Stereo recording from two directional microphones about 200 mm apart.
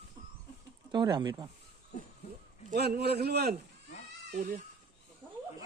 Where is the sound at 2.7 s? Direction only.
50° right (ahead or behind).